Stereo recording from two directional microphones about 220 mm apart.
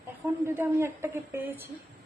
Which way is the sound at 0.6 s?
10° right (ahead or behind).